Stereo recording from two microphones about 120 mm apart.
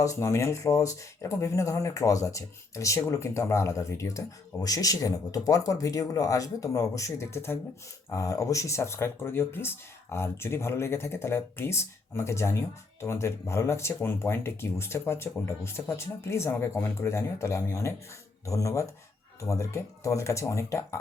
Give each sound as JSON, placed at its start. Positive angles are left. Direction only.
{"t": 0.0, "sound": "speech", "side_deg": 25}